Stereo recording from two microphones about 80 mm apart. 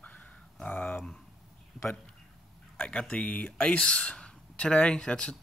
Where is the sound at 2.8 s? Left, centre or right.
Centre.